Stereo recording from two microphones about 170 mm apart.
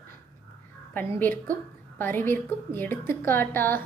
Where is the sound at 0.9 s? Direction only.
10° left (ahead or behind).